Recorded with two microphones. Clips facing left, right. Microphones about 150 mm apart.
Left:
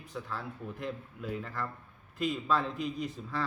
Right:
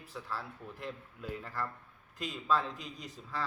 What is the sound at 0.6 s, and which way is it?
Speech, 20° left (ahead or behind).